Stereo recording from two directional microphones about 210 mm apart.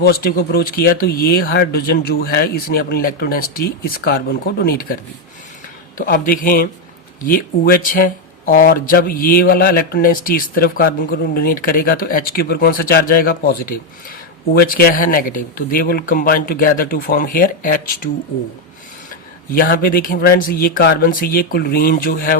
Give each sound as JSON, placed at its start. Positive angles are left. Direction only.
{"t": 0.0, "sound": "speech", "side_deg": 45}
{"t": 6.0, "sound": "speech", "side_deg": 40}
{"t": 19.5, "sound": "speech", "side_deg": 45}